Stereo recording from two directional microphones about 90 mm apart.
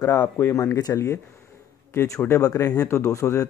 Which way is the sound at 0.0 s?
30° left (ahead or behind).